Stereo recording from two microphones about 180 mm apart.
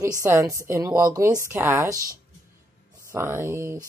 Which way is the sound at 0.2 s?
15° right (ahead or behind).